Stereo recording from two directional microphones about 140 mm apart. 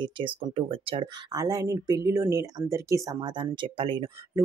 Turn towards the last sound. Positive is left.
turn(degrees=-40)  # may be behind; listen again after turning